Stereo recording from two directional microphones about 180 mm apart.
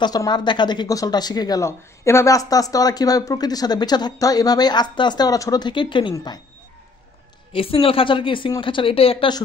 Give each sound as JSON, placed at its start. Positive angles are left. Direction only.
{"t": 0.0, "sound": "a woman's voice", "side_deg": 25}
{"t": 7.5, "sound": "a woman's voice", "side_deg": 30}